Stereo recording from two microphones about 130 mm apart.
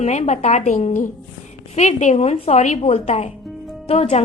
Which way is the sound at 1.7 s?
60° left (ahead or behind).